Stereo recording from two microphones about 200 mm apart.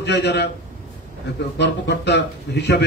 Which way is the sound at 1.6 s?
60° left (ahead or behind).